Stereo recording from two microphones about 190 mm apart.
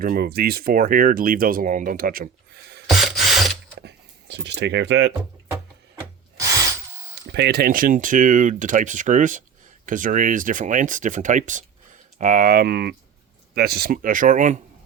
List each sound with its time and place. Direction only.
0.0 s speech: 50° right (ahead or behind)
2.9 s ratchet: centre (ahead or behind)
3.8 s a sound: 60° right (ahead or behind)
6.0 s drill: 15° right (ahead or behind)
7.3 s speech: 60° right (ahead or behind); by 14.6 s 40° right (ahead or behind)